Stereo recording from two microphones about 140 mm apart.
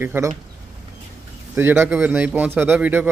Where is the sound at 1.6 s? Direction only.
15° right (ahead or behind).